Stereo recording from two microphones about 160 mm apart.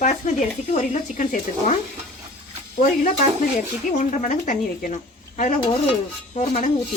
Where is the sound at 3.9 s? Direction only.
50° left (ahead or behind).